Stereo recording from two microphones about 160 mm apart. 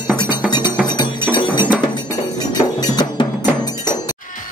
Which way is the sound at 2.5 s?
25° left (ahead or behind).